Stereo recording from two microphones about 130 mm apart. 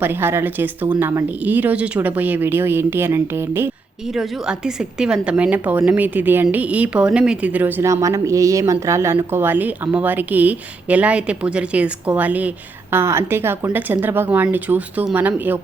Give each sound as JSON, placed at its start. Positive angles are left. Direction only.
{"t": 0.0, "sound": "a woman's voice", "side_deg": -15}
{"t": 4.1, "sound": "a woman's voice", "side_deg": -5}